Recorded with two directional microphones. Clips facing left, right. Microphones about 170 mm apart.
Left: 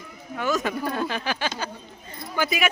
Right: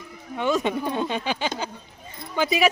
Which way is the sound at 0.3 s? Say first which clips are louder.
Right 2 dB; 25° right (ahead or behind).